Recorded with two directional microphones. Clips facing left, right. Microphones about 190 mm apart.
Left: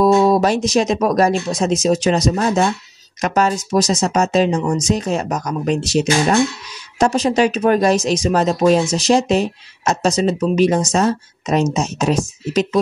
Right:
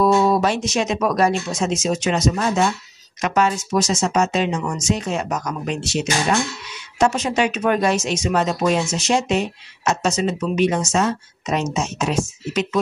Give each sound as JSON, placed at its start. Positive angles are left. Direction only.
{"t": 0.0, "sound": "speech", "side_deg": 40}